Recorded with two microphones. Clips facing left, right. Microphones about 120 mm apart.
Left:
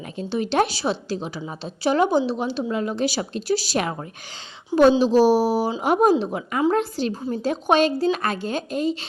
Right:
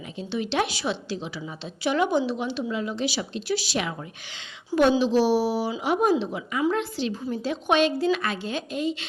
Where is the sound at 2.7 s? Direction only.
45° left (ahead or behind).